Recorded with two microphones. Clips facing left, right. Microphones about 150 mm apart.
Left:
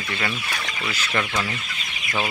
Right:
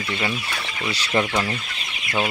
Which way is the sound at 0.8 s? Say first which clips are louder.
Right 5 dB; 30° right (ahead or behind).